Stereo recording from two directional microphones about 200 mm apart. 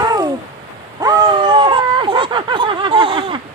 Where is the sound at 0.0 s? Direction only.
20° right (ahead or behind).